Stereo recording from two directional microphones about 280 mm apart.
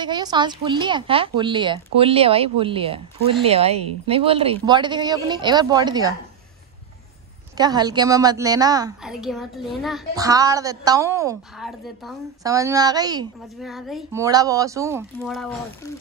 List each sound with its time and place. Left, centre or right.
0.0 s a woman's voice: centre
7.5 s a woman's voice: centre
9.0 s a child's voice: centre
10.1 s a woman's voice: centre
12.4 s a woman's voice: centre
13.6 s a child's voice: centre
14.2 s a woman's voice: centre
15.1 s a child's voice: centre